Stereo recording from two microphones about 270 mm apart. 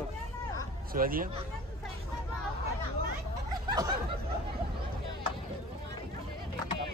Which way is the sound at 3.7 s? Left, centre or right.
Centre.